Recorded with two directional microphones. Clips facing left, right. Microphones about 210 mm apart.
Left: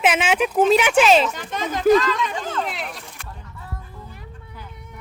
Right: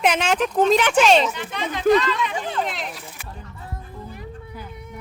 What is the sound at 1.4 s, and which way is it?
Speech, 45° left (ahead or behind).